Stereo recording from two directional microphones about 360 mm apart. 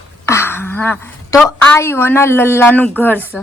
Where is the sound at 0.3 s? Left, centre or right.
Centre.